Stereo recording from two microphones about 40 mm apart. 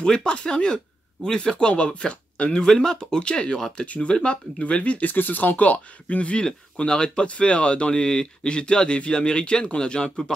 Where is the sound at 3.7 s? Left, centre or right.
Left.